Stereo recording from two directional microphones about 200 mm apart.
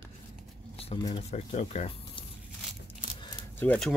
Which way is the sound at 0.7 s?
25° left (ahead or behind).